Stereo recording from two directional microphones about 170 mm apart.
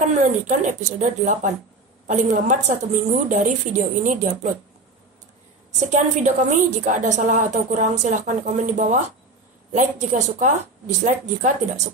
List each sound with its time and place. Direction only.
0.0 s a woman's voice: 45° right (ahead or behind)
5.8 s a woman's voice: 45° right (ahead or behind)